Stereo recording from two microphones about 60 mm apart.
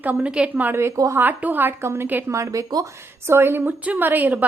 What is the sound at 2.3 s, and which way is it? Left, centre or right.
Speech, right.